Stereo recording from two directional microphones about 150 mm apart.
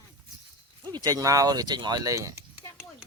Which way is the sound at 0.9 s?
25° right (ahead or behind).